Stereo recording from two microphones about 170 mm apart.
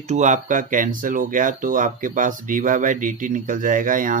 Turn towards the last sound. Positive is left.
turn(degrees=-50)  # may be behind; listen again after turning